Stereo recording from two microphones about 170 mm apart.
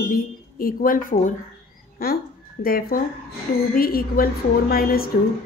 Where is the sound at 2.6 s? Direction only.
60° left (ahead or behind).